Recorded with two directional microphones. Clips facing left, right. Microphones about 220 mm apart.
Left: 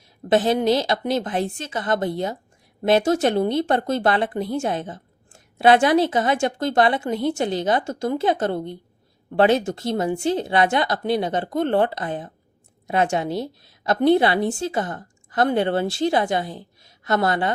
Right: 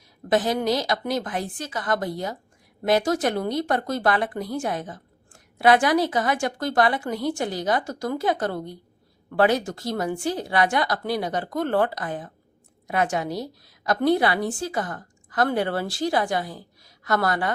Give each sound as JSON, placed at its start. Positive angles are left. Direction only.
{"t": 0.3, "sound": "speech", "side_deg": 25}